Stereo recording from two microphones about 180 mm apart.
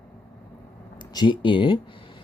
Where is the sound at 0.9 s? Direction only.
25° left (ahead or behind).